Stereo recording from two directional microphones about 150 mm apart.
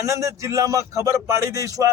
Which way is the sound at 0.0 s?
20° right (ahead or behind).